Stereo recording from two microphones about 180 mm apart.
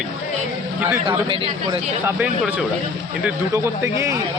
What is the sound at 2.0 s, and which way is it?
Speech, 10° right (ahead or behind).